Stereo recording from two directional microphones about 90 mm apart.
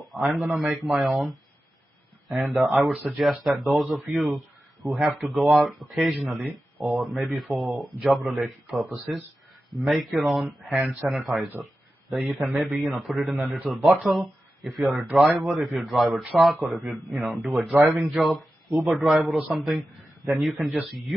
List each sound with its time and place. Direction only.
0.1 s speech: centre (ahead or behind)